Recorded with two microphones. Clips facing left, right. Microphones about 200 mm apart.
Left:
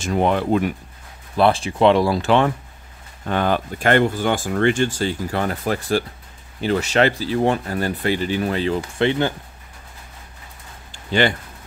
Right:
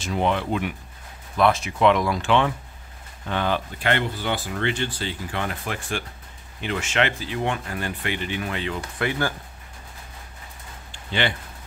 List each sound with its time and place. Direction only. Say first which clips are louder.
0.0 s speech: left 5 dB; 50° left (ahead or behind)
1.3 s speech: left 3 dB; 30° left (ahead or behind)
10.9 s a sound: left 7 dB; 40° left (ahead or behind)